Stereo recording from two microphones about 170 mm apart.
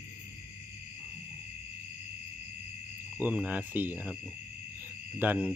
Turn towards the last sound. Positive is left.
turn(degrees=-10)  # may be behind; listen again after turning